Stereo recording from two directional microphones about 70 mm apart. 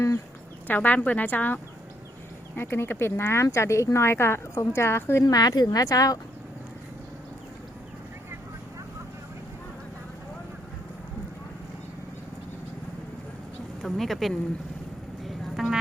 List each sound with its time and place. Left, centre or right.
0.7 s speech: left
2.6 s speech: left
5.2 s speech: left
13.8 s speech: centre
15.2 s a sound: centre